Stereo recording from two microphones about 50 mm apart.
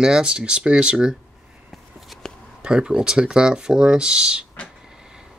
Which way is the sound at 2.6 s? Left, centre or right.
Centre.